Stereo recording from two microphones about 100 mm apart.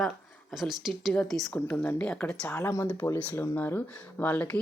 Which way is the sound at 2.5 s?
25° left (ahead or behind).